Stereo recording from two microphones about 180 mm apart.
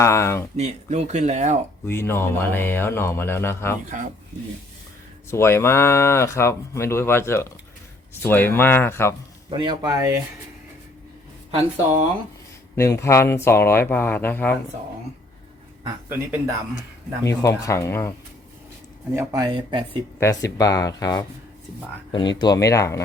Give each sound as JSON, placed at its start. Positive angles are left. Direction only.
{"t": 0.0, "sound": "speech", "side_deg": 15}
{"t": 0.5, "sound": "speech", "side_deg": -40}
{"t": 1.9, "sound": "speech", "side_deg": 15}
{"t": 5.3, "sound": "speech", "side_deg": 15}
{"t": 9.5, "sound": "speech", "side_deg": -25}
{"t": 11.5, "sound": "speech", "side_deg": -35}
{"t": 12.7, "sound": "speech", "side_deg": 15}
{"t": 17.2, "sound": "speech", "side_deg": 15}
{"t": 19.1, "sound": "speech", "side_deg": -20}
{"t": 20.1, "sound": "speech", "side_deg": 15}
{"t": 22.4, "sound": "speech", "side_deg": 20}